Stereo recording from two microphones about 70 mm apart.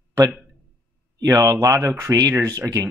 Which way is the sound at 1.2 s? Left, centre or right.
Right.